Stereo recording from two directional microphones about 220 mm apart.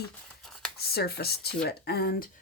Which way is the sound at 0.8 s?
45° left (ahead or behind).